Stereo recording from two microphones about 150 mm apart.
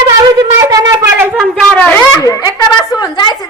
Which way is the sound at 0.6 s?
20° right (ahead or behind).